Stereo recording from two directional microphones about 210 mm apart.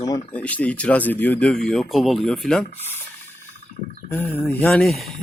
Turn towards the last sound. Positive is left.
turn(degrees=0)  # may be behind; listen again after turning